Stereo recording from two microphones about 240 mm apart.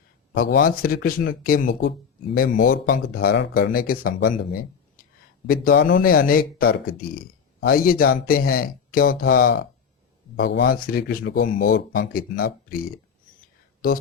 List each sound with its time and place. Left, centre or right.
0.3 s speech: left
5.0 s a sound: left
5.5 s speech: left